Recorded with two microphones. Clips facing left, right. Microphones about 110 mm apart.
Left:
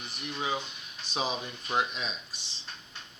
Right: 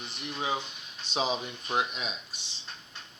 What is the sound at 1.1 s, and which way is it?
Speech, 25° right (ahead or behind).